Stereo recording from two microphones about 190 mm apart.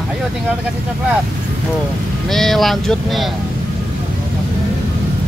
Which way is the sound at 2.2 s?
Centre (ahead or behind).